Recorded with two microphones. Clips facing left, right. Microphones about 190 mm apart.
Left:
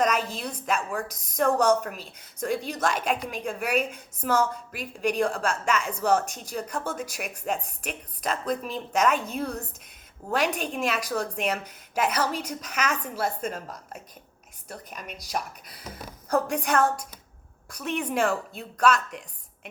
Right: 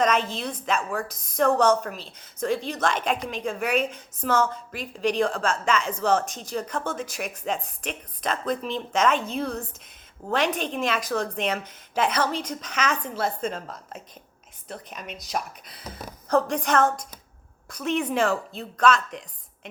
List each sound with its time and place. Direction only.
0.0 s a woman's voice: 10° left (ahead or behind)
14.8 s a woman's voice: 10° left (ahead or behind)
16.3 s a woman's voice: 10° left (ahead or behind)